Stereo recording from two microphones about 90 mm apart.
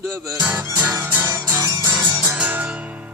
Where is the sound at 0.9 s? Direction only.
25° right (ahead or behind).